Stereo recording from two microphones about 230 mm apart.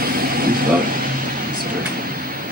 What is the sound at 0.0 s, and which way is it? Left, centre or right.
Vehicle, right.